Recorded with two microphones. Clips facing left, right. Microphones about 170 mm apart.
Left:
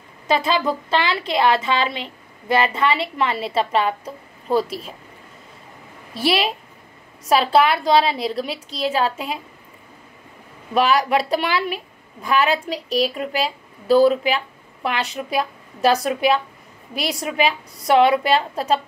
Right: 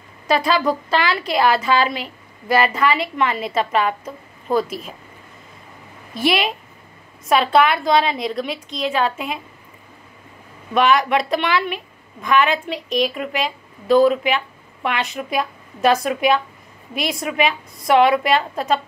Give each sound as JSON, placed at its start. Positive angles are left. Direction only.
{"t": 0.3, "sound": "a woman's voice", "side_deg": 25}
{"t": 6.1, "sound": "a woman's voice", "side_deg": 30}
{"t": 10.7, "sound": "a woman's voice", "side_deg": 35}